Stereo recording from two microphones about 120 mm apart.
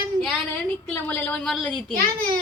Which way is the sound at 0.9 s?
15° left (ahead or behind).